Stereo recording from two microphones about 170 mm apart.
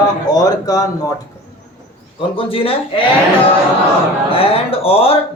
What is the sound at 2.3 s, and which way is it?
Speech, 30° left (ahead or behind).